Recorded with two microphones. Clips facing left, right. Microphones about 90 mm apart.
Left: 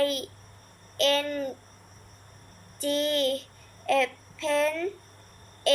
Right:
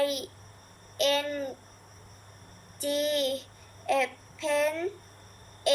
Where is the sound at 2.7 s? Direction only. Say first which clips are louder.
Left 2 dB; 15° right (ahead or behind).